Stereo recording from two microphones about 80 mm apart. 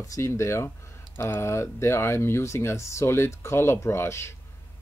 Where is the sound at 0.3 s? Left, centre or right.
Left.